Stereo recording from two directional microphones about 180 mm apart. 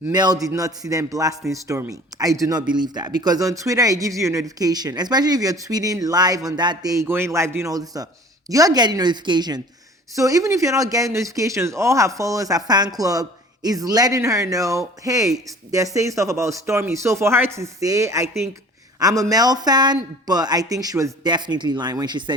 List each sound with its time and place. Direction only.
0.1 s speech: 20° right (ahead or behind)